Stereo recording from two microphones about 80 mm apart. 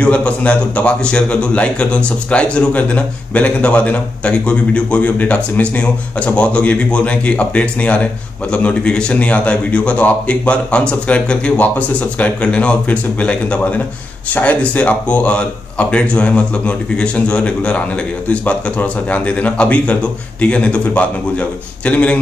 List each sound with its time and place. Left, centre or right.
0.0 s a man's voice: centre